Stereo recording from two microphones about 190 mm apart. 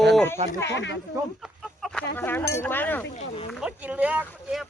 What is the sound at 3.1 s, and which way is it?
Speech, 40° left (ahead or behind).